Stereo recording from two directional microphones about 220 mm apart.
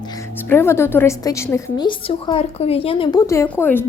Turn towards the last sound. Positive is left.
turn(degrees=10)  # may be behind; listen again after turning